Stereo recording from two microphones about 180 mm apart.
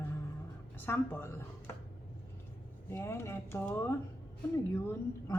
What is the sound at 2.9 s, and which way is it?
Speech, 15° left (ahead or behind).